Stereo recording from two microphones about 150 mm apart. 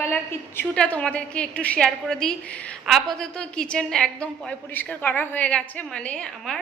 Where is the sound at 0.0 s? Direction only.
15° left (ahead or behind).